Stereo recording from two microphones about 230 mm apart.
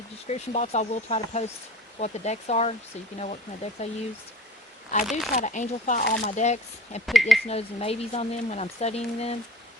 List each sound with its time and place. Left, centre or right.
0.3 s speech: left
5.3 s speech: left
7.0 s speech: centre
7.4 s speech: left